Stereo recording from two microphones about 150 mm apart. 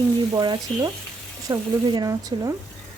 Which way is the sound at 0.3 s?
25° right (ahead or behind).